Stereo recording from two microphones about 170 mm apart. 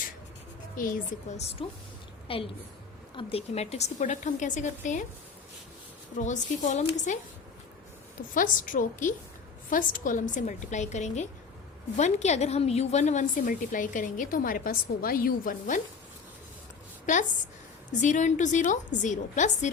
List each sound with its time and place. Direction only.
0.8 s a woman's voice: 50° left (ahead or behind)
2.2 s a woman's voice: 30° left (ahead or behind)
6.1 s a woman's voice: 45° left (ahead or behind)
8.3 s a woman's voice: 50° left (ahead or behind)
18.0 s a woman's voice: 45° left (ahead or behind)